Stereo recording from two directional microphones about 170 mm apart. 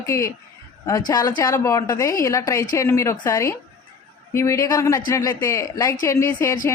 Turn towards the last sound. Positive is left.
turn(degrees=15)  # may be behind; listen again after turning